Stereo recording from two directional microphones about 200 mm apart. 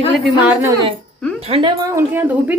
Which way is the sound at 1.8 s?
15° right (ahead or behind).